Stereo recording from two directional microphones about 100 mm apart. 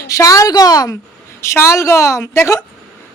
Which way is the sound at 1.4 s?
25° left (ahead or behind).